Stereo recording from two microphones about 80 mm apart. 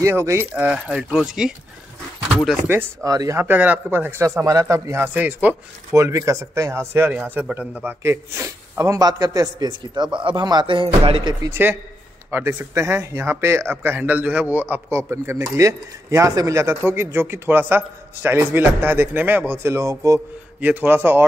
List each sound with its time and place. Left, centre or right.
0.0 s speech: right
0.6 s speech: centre
3.0 s speech: right
3.3 s speech: right
4.2 s speech: right
5.0 s speech: right
5.9 s speech: right
7.3 s speech: centre
8.0 s a man's voice: right
12.3 s speech: right
13.8 s speech: right
14.9 s speech: right
19.7 s speech: right
20.6 s speech: right